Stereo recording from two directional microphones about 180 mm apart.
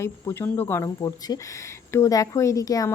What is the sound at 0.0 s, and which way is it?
A woman's voice, 15° left (ahead or behind).